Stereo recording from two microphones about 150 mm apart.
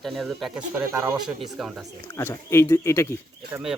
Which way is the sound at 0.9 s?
15° right (ahead or behind).